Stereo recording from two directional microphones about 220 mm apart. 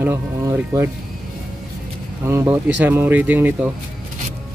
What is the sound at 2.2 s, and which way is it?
Speech, 10° right (ahead or behind).